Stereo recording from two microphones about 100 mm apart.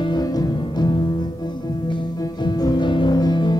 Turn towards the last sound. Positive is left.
turn(degrees=45)  # may be behind; listen again after turning